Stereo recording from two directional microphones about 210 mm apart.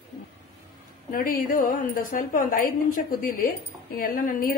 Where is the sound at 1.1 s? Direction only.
40° left (ahead or behind).